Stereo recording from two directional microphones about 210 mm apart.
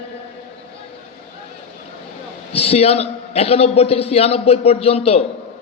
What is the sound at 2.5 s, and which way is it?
A man's voice, 30° left (ahead or behind).